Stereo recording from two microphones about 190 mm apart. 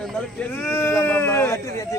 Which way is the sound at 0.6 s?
15° left (ahead or behind).